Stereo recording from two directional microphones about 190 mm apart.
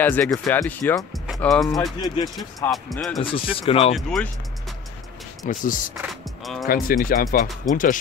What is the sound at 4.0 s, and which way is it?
Speech, 5° left (ahead or behind).